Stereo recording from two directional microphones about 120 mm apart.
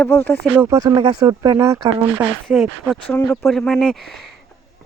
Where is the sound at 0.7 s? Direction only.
30° right (ahead or behind).